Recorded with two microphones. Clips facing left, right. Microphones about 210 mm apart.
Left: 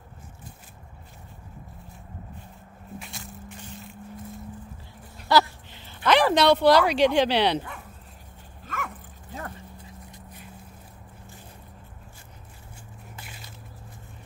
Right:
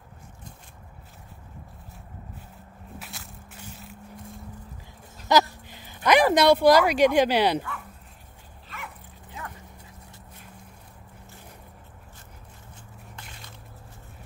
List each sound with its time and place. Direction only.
3.0 s a sound: centre (ahead or behind)
6.0 s speech: 15° right (ahead or behind)
8.6 s dog: 45° left (ahead or behind)
13.1 s squish: 5° left (ahead or behind)